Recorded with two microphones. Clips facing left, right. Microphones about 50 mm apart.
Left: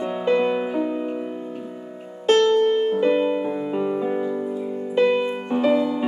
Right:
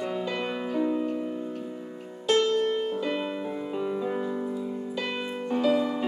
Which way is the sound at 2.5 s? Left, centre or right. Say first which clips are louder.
Left 8 dB; left.